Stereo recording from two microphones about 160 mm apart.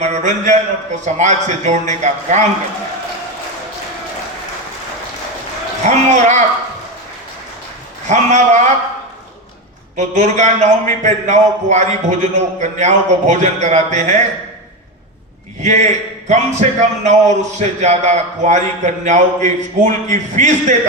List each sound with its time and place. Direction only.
0.0 s speech: 45° right (ahead or behind)
5.8 s speech: 45° right (ahead or behind)
8.0 s speech: 45° right (ahead or behind)
10.0 s speech: 45° right (ahead or behind)
15.6 s speech: 45° right (ahead or behind)